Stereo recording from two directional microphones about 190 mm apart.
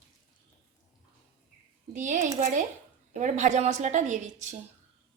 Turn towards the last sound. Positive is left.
turn(degrees=-40)  # may be behind; listen again after turning